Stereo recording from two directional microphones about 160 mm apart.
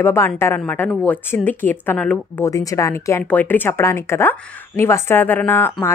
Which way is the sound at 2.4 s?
20° left (ahead or behind).